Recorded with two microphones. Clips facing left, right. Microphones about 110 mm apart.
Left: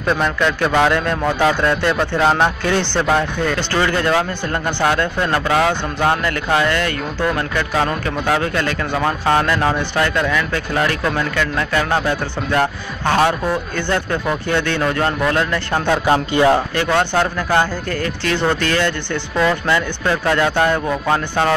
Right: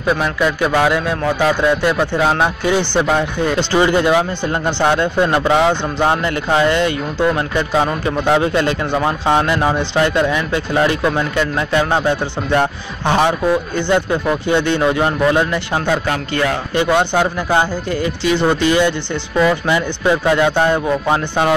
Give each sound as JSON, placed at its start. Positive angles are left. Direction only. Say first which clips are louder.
{"t": 0.0, "sound": "speech", "louder": "right 1 dB", "side_deg": -5}
{"t": 16.1, "sound": "speech", "louder": "left 5 dB", "side_deg": 30}
{"t": 16.7, "sound": "speech", "louder": "right 2 dB", "side_deg": -15}